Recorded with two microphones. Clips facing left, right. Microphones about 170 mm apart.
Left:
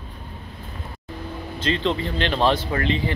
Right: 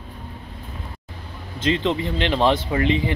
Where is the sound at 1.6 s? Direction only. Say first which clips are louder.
Right 2 dB; 15° right (ahead or behind).